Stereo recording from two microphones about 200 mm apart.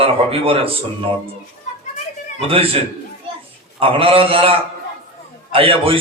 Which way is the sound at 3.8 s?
30° right (ahead or behind).